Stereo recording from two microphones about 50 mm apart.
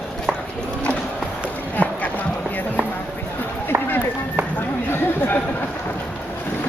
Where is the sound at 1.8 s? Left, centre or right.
Left.